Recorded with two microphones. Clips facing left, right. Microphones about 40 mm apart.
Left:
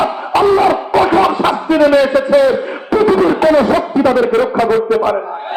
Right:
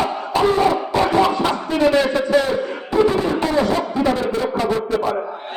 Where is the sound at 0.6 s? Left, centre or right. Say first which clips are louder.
Left 5 dB; left.